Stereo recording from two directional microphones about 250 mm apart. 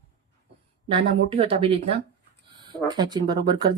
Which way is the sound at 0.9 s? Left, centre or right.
Right.